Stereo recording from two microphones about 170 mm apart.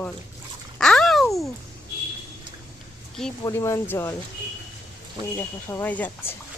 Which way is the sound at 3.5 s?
15° left (ahead or behind).